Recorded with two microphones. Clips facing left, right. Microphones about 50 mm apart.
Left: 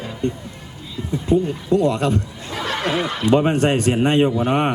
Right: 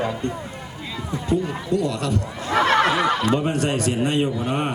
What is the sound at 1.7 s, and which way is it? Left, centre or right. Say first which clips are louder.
Speech: left 6 dB; left.